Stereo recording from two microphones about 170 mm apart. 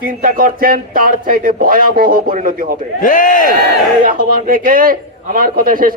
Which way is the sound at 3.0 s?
50° left (ahead or behind).